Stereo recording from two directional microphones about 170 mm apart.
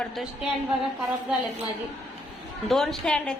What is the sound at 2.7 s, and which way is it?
Speech, centre (ahead or behind).